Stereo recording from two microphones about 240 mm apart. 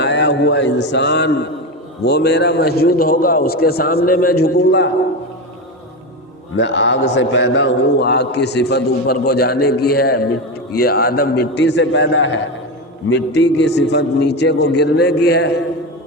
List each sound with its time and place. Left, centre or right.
0.0 s a man's voice: left
6.6 s a man's voice: left